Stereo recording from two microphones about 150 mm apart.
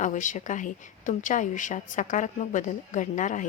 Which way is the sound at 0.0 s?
55° left (ahead or behind).